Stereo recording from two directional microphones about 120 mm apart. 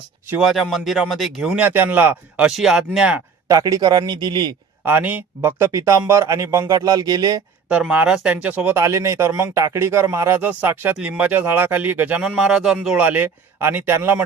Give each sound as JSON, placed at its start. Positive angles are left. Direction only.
{"t": 0.4, "sound": "speech", "side_deg": 0}
{"t": 3.5, "sound": "speech", "side_deg": -30}
{"t": 4.9, "sound": "speech", "side_deg": -15}
{"t": 7.7, "sound": "speech", "side_deg": -10}